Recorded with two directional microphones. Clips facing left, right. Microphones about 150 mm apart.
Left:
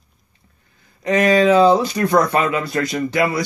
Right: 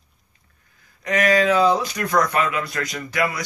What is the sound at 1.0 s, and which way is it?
Speech, 25° left (ahead or behind).